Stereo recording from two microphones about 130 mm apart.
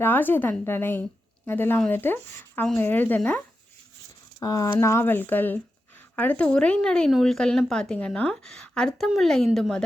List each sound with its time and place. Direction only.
0.0 s a woman's voice: 15° left (ahead or behind)
4.4 s a woman's voice: 25° left (ahead or behind); by 9.8 s centre (ahead or behind)